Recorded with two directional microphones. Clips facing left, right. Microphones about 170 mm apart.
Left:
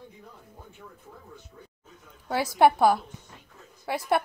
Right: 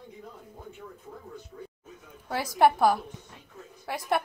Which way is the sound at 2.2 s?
5° left (ahead or behind).